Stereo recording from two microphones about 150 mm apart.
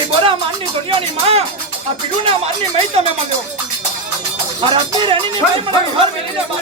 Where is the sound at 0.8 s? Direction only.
40° right (ahead or behind).